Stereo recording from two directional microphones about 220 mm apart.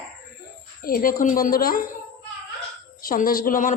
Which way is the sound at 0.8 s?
40° left (ahead or behind).